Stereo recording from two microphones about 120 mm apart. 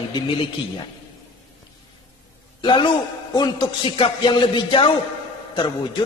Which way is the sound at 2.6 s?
40° left (ahead or behind).